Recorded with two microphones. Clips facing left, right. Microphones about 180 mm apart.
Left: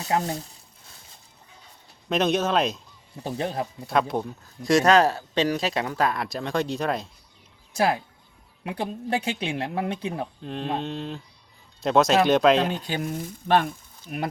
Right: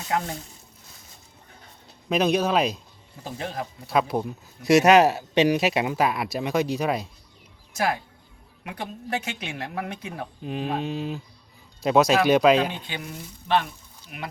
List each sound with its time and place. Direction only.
0.0 s frying: 35° left (ahead or behind)
2.0 s speech: centre (ahead or behind)
3.2 s speech: 30° left (ahead or behind)
3.8 s speech: 5° right (ahead or behind)
7.7 s speech: 30° left (ahead or behind)
10.4 s speech: 5° right (ahead or behind)
14.1 s frying: 40° left (ahead or behind)